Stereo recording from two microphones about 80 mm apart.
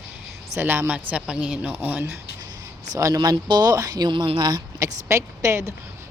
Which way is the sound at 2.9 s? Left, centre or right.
Right.